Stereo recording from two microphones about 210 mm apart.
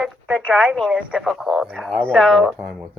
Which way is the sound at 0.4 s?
Centre (ahead or behind).